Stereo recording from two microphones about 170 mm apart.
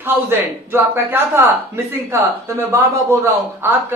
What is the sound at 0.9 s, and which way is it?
Speech, 10° right (ahead or behind).